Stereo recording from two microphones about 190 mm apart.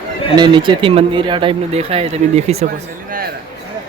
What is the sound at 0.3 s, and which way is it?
Speech, 25° right (ahead or behind).